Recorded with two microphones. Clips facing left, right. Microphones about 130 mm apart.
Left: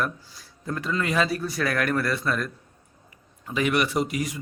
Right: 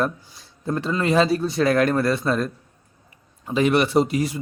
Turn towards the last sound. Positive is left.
turn(degrees=-30)  # may be behind; listen again after turning